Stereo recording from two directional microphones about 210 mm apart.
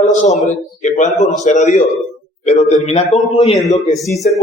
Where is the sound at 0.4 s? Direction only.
35° left (ahead or behind).